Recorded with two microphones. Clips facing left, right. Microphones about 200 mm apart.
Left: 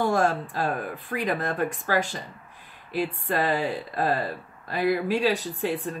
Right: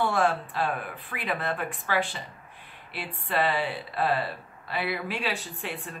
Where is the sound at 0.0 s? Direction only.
40° left (ahead or behind).